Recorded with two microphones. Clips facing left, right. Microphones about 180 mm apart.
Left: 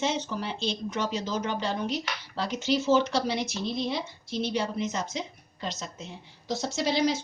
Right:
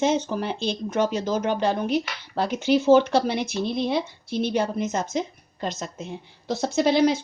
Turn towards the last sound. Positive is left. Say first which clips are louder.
# right 7 dB
turn(degrees=-55)  # may be behind; listen again after turning